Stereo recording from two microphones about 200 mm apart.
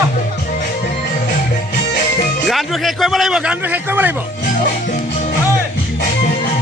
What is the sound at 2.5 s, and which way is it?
A man's voice, centre (ahead or behind).